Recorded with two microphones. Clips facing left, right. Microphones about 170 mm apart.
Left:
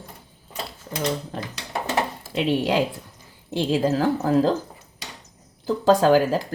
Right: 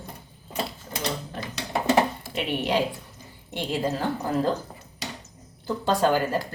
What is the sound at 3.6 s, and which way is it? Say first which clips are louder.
Speech: left 6 dB; 90° left.